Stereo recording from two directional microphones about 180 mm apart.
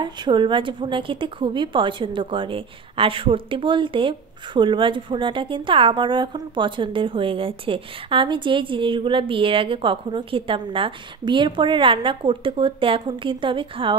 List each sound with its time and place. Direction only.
0.0 s a woman's voice: 25° right (ahead or behind)